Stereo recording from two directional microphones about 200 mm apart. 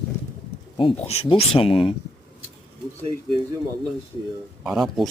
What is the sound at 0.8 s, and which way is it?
Speech, 30° left (ahead or behind).